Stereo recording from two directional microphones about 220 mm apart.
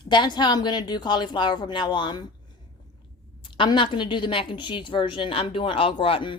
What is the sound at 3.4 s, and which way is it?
A woman's voice, 20° left (ahead or behind).